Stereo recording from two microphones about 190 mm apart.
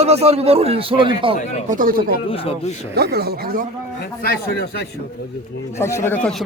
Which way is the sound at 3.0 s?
55° right (ahead or behind).